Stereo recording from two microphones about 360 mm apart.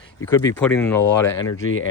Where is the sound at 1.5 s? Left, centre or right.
Left.